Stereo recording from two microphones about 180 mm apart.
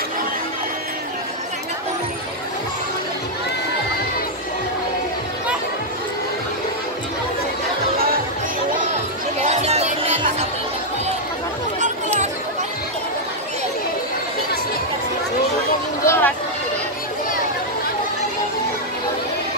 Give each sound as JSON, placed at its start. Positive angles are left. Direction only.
{"t": 9.4, "sound": "music", "side_deg": -35}
{"t": 11.8, "sound": "chatter", "side_deg": -40}
{"t": 16.1, "sound": "a sound", "side_deg": 10}